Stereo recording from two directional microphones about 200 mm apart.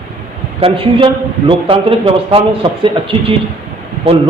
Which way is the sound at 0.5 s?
25° right (ahead or behind).